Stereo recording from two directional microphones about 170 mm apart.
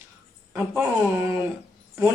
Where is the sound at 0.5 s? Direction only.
10° right (ahead or behind).